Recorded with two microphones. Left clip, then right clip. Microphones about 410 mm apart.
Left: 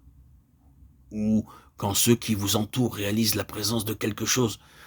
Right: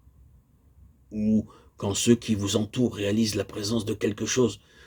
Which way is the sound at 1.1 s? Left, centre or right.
Left.